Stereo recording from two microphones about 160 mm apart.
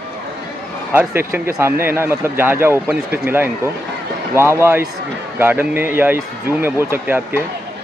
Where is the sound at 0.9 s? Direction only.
15° right (ahead or behind).